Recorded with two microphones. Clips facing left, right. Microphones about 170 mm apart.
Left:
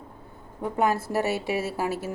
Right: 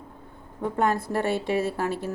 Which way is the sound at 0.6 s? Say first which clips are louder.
Even; 5° left (ahead or behind).